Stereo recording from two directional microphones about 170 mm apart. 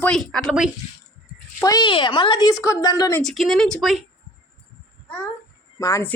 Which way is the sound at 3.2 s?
Centre (ahead or behind).